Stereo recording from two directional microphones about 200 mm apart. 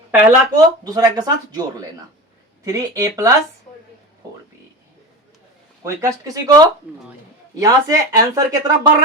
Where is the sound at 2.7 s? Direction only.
15° right (ahead or behind).